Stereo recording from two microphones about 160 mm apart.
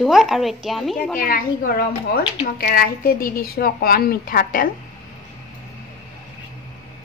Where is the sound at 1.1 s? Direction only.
60° left (ahead or behind).